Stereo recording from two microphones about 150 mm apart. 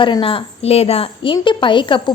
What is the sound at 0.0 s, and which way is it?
A woman's voice, 35° left (ahead or behind).